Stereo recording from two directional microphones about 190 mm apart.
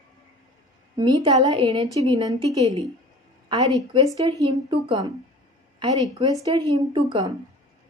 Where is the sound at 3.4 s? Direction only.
25° right (ahead or behind).